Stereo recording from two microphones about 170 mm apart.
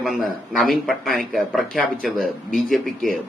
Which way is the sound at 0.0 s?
Centre (ahead or behind).